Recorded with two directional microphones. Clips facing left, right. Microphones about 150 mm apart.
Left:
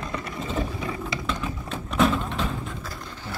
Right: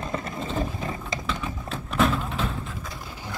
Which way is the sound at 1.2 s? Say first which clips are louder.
Left 1 dB; centre (ahead or behind).